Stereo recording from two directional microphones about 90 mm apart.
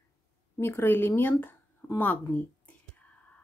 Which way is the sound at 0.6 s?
25° left (ahead or behind).